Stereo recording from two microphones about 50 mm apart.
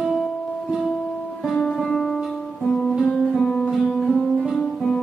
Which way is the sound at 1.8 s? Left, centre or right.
Centre.